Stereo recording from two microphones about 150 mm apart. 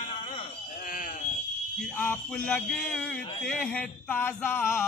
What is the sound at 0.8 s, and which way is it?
Sheep, 65° left (ahead or behind).